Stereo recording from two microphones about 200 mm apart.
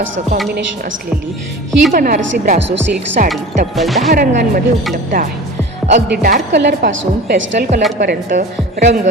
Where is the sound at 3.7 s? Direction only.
Centre (ahead or behind).